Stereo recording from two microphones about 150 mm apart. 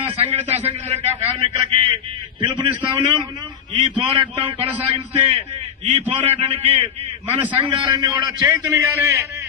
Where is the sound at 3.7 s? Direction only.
30° right (ahead or behind).